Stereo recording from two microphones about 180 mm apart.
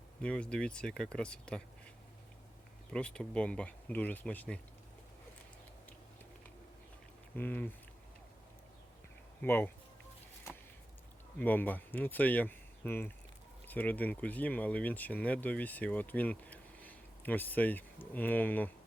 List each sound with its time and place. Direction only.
0.2 s speech: 5° left (ahead or behind)
2.9 s speech: 5° left (ahead or behind)
7.3 s speech: 10° left (ahead or behind)
9.4 s speech: 10° left (ahead or behind)
11.3 s speech: 10° left (ahead or behind)